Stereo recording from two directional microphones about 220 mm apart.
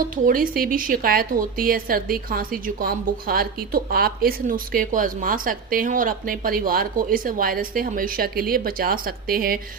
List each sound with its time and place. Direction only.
0.3 s a woman's voice: 40° right (ahead or behind)